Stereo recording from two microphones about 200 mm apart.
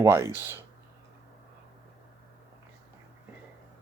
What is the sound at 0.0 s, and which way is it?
Speech, 15° right (ahead or behind).